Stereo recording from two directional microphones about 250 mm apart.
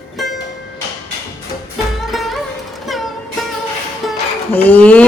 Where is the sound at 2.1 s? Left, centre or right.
Centre.